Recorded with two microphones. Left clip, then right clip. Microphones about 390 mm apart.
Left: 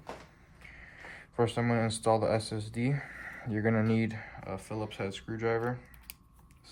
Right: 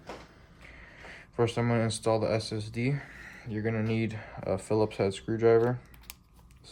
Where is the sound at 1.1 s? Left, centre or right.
Centre.